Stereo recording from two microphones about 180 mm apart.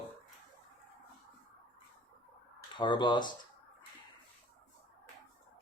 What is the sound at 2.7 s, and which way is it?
Speech, 25° left (ahead or behind).